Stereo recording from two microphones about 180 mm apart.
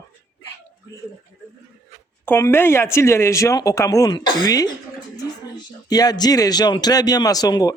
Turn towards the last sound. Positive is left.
turn(degrees=20)  # may be behind; listen again after turning